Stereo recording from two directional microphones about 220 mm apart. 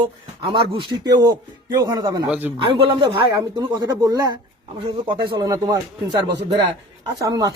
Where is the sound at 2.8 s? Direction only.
25° right (ahead or behind).